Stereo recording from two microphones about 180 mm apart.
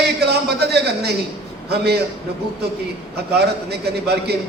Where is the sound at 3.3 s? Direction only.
65° right (ahead or behind).